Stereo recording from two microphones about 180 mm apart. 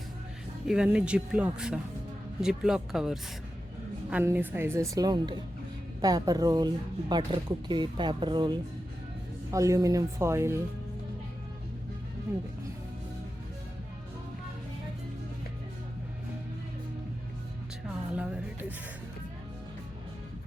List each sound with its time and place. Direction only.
0.7 s a woman's voice: 5° right (ahead or behind)
17.8 s music: 5° right (ahead or behind)